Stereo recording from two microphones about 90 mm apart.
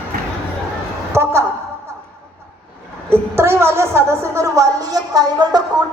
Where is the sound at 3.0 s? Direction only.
25° right (ahead or behind); by 5.6 s 50° right (ahead or behind).